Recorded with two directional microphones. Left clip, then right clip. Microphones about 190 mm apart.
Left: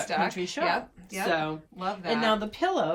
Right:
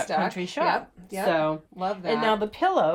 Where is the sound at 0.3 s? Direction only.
40° right (ahead or behind).